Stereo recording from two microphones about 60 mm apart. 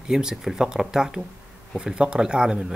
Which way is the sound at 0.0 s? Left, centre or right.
Centre.